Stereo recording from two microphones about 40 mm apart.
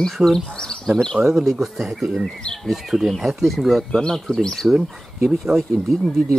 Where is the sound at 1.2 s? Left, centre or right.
Centre.